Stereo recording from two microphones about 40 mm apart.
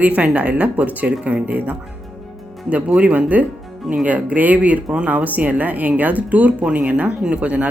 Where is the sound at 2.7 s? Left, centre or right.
Right.